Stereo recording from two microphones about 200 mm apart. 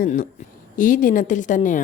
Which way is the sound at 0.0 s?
40° left (ahead or behind).